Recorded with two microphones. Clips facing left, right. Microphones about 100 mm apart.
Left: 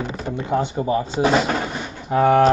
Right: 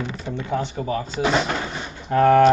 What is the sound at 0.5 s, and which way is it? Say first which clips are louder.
Speech: left 4 dB; 20° left (ahead or behind).